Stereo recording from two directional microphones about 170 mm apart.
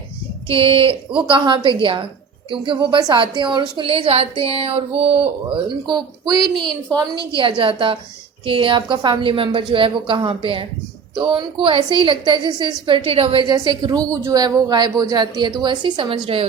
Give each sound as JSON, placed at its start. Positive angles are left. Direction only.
{"t": 0.4, "sound": "a woman's voice", "side_deg": -30}